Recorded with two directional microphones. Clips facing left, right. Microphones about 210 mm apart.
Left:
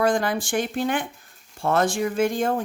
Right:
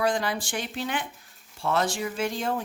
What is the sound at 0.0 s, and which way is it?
Speech, 50° left (ahead or behind).